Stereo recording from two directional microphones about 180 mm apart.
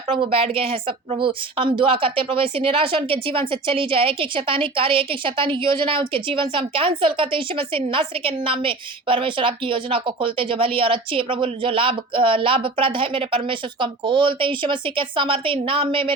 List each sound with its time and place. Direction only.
0.2 s a woman's voice: 30° right (ahead or behind)